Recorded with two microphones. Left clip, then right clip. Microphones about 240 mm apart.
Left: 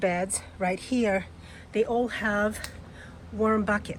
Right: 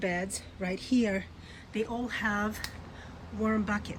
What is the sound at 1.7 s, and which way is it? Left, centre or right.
Speech, centre.